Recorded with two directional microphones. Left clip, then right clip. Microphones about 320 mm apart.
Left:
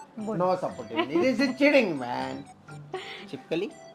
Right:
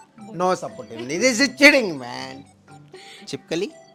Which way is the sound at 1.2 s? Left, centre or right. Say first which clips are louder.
Right 11 dB; right.